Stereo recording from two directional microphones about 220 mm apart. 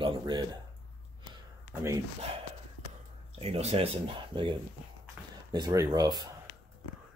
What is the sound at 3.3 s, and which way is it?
Speech, 30° right (ahead or behind).